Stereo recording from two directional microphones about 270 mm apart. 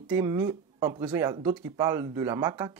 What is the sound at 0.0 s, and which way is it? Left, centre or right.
Speech, centre.